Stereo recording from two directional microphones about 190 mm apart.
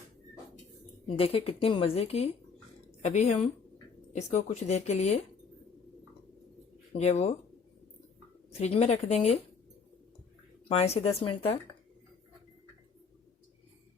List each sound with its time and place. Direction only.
1.0 s speech: 30° left (ahead or behind)
6.9 s speech: 35° left (ahead or behind)
8.6 s speech: 35° left (ahead or behind)
10.7 s speech: 35° left (ahead or behind)